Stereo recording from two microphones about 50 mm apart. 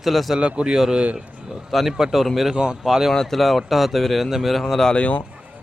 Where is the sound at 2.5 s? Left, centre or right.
Centre.